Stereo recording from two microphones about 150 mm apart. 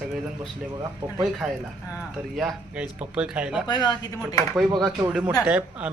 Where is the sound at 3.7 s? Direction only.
25° left (ahead or behind).